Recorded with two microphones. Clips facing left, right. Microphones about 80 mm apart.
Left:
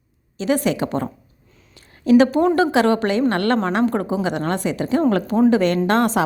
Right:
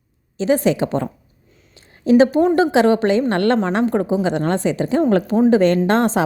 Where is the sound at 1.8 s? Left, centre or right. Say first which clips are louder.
Right 1 dB; right.